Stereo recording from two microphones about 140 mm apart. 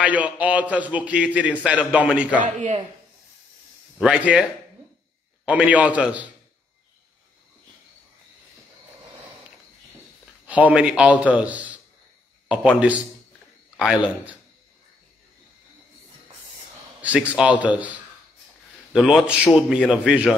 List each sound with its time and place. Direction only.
0.0 s a man's voice: 10° right (ahead or behind)
2.4 s speech: 65° right (ahead or behind)
4.0 s a man's voice: 5° right (ahead or behind)
10.4 s a man's voice: 10° right (ahead or behind)
17.0 s a man's voice: 10° right (ahead or behind)